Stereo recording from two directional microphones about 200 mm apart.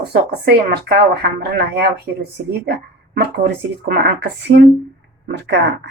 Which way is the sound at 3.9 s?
55° right (ahead or behind).